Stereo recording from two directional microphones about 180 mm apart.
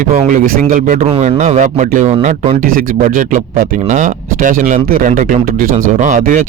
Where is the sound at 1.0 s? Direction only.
35° right (ahead or behind).